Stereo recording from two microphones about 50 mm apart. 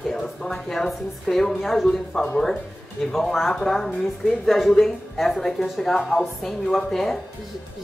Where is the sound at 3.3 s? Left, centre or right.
Centre.